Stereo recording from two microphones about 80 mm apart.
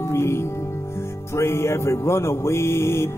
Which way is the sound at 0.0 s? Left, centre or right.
Left.